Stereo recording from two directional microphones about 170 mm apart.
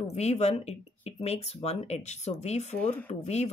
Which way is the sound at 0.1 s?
40° left (ahead or behind).